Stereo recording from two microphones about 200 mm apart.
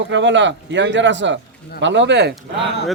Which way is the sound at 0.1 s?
65° right (ahead or behind).